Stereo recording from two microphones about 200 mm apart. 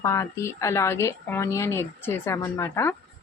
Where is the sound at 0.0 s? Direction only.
15° left (ahead or behind).